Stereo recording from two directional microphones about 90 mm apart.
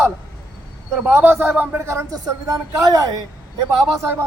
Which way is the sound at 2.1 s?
40° right (ahead or behind).